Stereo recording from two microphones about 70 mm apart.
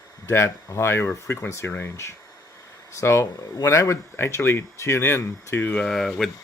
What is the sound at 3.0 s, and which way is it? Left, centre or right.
Speech, left.